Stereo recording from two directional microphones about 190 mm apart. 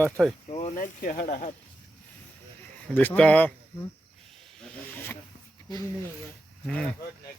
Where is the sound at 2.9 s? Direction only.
10° left (ahead or behind).